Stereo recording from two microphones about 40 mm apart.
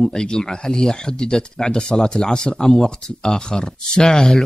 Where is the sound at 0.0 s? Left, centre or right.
Centre.